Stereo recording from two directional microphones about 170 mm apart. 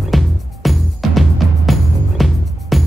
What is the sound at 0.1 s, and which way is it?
Music, centre (ahead or behind).